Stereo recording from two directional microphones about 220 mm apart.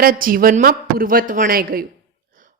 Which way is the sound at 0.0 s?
40° right (ahead or behind).